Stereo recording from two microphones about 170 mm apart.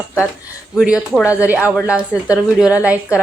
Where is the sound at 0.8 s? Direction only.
5° right (ahead or behind).